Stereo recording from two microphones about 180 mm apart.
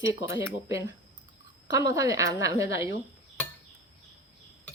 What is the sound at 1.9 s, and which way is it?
Speech, 15° right (ahead or behind).